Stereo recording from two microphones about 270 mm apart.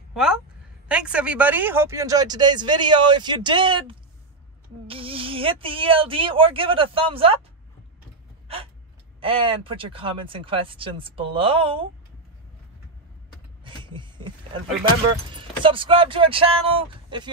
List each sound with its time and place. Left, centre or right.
0.1 s a woman's voice: centre
9.2 s speech: centre
13.7 s a sound: centre
15.3 s speech: centre